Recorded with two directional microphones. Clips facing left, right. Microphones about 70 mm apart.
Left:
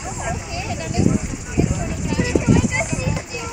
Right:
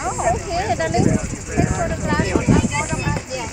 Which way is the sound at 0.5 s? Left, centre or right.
Right.